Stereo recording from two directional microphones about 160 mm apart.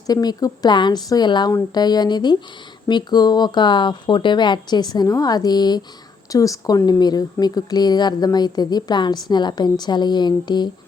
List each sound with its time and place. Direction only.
0.1 s speech: 25° left (ahead or behind)